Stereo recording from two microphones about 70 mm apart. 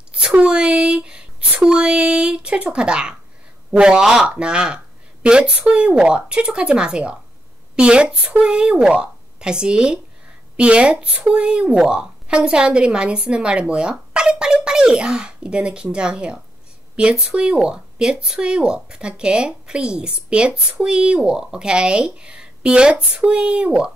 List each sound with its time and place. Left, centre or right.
0.1 s speech: centre